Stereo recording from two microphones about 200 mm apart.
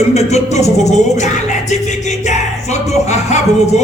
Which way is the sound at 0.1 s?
35° left (ahead or behind).